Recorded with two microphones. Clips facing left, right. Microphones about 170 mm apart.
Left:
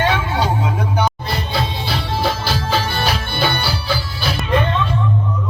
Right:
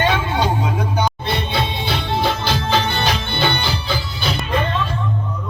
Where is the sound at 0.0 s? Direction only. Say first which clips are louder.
Even; 20° right (ahead or behind).